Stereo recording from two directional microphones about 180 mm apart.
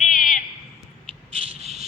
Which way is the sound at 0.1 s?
45° left (ahead or behind).